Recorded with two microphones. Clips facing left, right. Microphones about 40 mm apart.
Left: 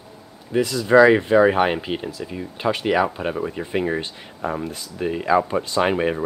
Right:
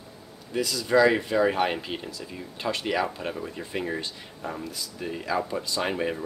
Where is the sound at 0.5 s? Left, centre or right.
Left.